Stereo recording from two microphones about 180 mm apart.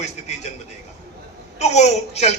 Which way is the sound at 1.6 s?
40° left (ahead or behind).